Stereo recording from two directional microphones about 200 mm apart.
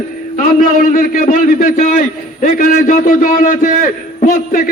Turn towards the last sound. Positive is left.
turn(degrees=45)  # may be behind; listen again after turning